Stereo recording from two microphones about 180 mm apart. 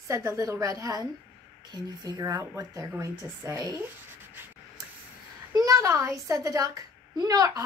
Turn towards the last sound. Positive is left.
turn(degrees=-20)  # may be behind; listen again after turning